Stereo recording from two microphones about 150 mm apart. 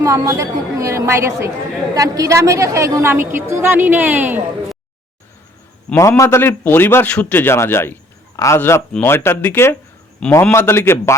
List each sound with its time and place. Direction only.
0.0 s a woman's voice: 20° right (ahead or behind)
6.0 s a man's voice: 20° left (ahead or behind)